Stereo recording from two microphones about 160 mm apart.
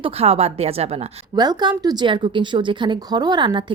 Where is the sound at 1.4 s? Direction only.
25° right (ahead or behind).